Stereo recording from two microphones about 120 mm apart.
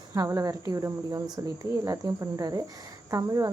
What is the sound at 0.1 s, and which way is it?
Speech, 30° right (ahead or behind).